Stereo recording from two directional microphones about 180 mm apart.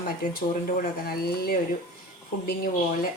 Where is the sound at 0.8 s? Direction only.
55° left (ahead or behind).